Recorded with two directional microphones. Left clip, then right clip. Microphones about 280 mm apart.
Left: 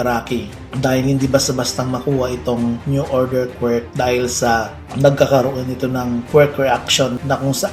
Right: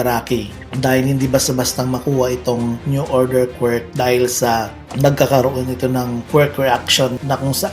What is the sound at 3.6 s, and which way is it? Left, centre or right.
Speech, right.